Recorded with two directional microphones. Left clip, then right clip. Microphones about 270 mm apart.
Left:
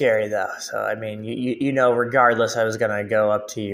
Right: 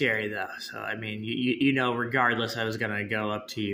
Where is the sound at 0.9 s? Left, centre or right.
Left.